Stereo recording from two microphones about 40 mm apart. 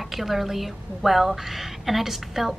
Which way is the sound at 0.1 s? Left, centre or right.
Centre.